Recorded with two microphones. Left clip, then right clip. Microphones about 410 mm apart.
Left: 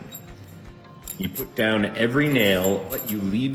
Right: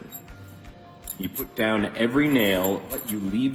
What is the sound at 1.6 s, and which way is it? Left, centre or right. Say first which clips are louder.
Speech: left 2 dB; left.